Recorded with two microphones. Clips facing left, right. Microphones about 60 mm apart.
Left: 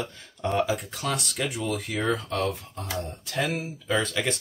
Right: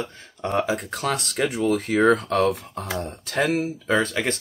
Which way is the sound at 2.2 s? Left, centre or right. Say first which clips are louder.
Right 7 dB; right.